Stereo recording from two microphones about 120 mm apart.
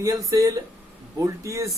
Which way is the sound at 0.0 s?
30° right (ahead or behind).